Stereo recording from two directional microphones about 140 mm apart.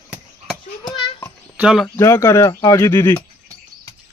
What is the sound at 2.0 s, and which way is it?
Speech, 20° left (ahead or behind).